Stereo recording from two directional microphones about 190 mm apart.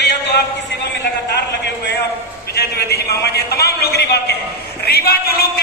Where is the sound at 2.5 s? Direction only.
55° left (ahead or behind).